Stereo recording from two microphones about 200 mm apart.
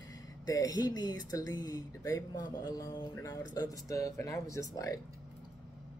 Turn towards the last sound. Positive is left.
turn(degrees=15)  # may be behind; listen again after turning